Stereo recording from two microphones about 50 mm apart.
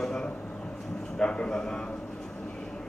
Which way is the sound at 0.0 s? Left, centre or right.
Centre.